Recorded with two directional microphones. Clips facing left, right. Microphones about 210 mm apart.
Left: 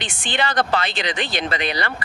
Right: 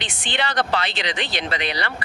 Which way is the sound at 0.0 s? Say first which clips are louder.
Left 2 dB; 50° left (ahead or behind).